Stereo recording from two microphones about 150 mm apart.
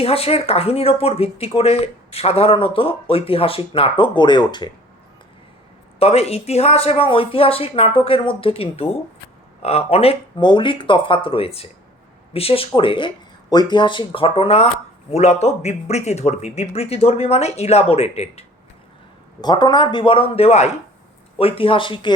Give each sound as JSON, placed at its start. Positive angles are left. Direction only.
{"t": 0.0, "sound": "speech", "side_deg": 40}
{"t": 6.0, "sound": "speech", "side_deg": 45}
{"t": 19.4, "sound": "speech", "side_deg": 30}